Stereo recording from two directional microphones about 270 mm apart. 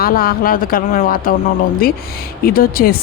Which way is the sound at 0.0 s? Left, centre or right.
Left.